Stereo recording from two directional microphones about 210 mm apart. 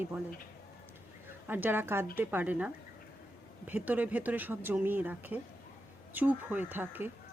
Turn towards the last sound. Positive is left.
turn(degrees=-10)  # may be behind; listen again after turning